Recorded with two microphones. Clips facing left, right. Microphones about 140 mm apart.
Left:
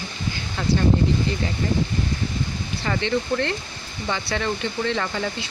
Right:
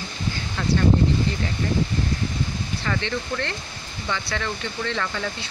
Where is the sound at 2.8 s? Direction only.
20° left (ahead or behind).